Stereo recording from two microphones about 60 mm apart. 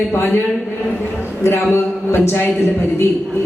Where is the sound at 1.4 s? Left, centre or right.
Left.